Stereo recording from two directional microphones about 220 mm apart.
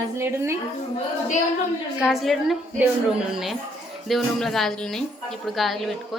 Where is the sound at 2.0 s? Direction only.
Centre (ahead or behind).